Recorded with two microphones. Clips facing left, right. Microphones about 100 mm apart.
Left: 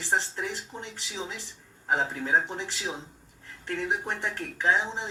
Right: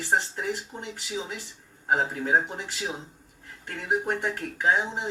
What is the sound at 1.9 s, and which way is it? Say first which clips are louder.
Speech: right 2 dB; 10° right (ahead or behind).